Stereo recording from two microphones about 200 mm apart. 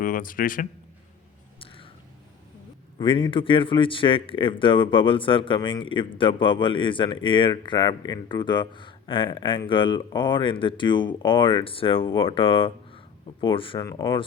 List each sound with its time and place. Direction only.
0.0 s a man's voice: 45° left (ahead or behind)
1.5 s whispering: 25° left (ahead or behind)
3.0 s speech: 25° left (ahead or behind)